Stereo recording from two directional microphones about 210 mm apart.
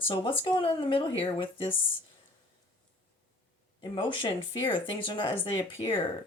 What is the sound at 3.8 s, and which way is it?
Speech, 25° left (ahead or behind).